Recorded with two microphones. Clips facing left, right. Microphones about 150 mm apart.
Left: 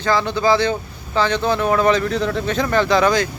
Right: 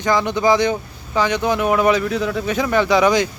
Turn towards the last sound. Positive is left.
turn(degrees=-15)  # may be behind; listen again after turning